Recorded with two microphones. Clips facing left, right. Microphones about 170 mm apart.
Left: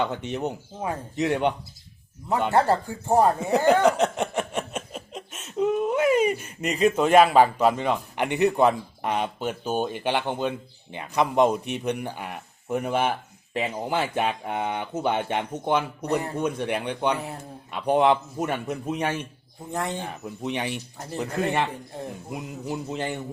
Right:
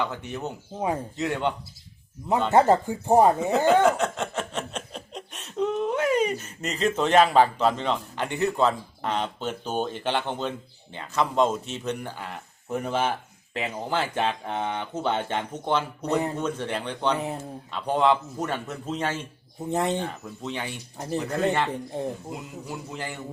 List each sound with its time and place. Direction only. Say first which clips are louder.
0.0 s a man's voice: left 3 dB; 20° left (ahead or behind)
2.5 s speech: right 3 dB; 20° right (ahead or behind)
3.8 s speech: left 2 dB; 20° left (ahead or behind)
17.2 s speech: right 4 dB; 20° right (ahead or behind)
17.7 s speech: left 2 dB; 15° left (ahead or behind)
19.7 s speech: right 4 dB; 20° right (ahead or behind)
20.0 s a man's voice: right 1 dB; 15° left (ahead or behind)
21.0 s speech: right 3 dB; 20° right (ahead or behind)
22.3 s a man's voice: left 4 dB; 20° left (ahead or behind)